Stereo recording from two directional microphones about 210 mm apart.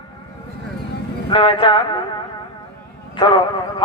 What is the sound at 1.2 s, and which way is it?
Speech, 25° left (ahead or behind).